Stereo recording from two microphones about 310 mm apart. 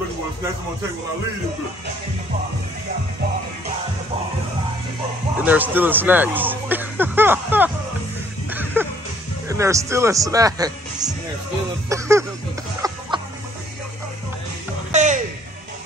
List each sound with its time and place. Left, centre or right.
5.4 s speech: centre
8.5 s music: centre
9.5 s speech: centre
11.9 s music: centre
12.8 s chicken: centre
14.9 s music: right